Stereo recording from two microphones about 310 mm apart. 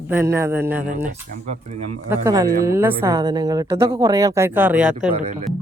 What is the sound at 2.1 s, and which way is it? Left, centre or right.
A woman's voice, centre.